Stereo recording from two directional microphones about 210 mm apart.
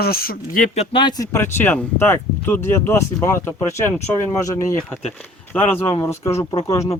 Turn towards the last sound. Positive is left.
turn(degrees=15)  # may be behind; listen again after turning